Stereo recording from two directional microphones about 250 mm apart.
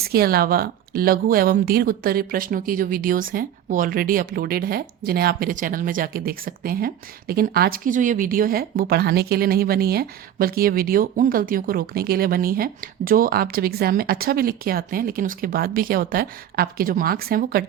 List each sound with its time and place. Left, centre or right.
0.0 s speech: right